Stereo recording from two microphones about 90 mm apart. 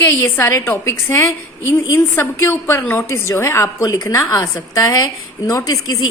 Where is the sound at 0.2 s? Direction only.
35° left (ahead or behind).